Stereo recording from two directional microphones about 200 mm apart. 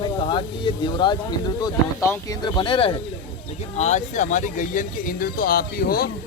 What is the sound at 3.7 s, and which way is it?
Speech, 35° left (ahead or behind).